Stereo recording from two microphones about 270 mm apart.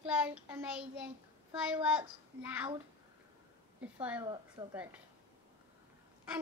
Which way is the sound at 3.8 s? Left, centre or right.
Centre.